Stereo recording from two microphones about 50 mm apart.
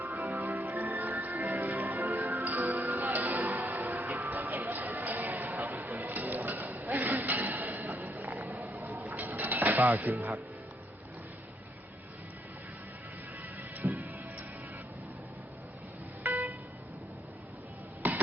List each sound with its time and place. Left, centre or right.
0.0 s music: right
13.6 s music: right
16.2 s music: right
18.0 s music: right